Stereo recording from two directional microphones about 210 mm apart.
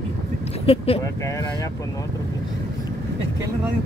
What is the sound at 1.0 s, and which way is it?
Speech, 15° left (ahead or behind).